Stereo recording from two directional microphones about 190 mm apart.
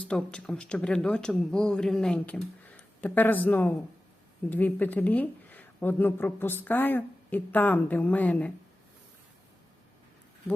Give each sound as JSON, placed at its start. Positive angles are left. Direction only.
{"t": 0.0, "sound": "speech", "side_deg": 5}